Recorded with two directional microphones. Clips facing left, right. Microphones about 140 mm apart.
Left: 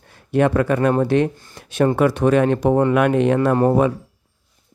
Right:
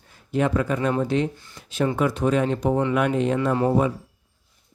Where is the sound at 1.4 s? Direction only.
55° left (ahead or behind).